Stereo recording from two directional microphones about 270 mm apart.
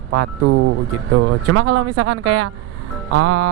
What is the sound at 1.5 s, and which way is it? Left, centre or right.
Speech, right.